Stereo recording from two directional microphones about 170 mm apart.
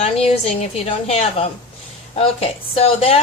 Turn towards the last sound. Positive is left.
turn(degrees=35)  # may be behind; listen again after turning